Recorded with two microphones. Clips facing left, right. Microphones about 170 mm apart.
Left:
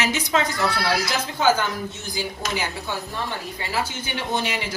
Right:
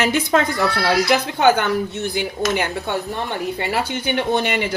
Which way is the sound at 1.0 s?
65° right (ahead or behind).